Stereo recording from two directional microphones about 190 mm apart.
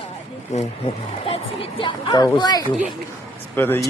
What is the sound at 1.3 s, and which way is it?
Speech, 30° left (ahead or behind).